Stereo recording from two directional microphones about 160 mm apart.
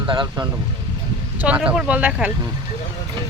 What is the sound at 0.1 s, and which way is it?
Speech, 30° right (ahead or behind).